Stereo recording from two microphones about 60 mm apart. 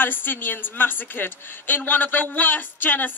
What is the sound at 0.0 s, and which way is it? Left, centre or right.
A woman's voice, left.